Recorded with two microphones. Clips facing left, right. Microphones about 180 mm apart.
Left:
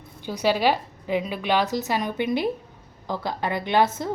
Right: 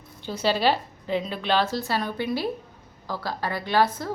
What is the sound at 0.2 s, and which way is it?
A woman's voice, 15° left (ahead or behind).